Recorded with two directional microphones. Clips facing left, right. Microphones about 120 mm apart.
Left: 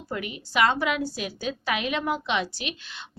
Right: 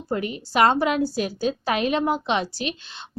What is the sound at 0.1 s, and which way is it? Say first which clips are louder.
A woman's voice: right 5 dB; 35° right (ahead or behind).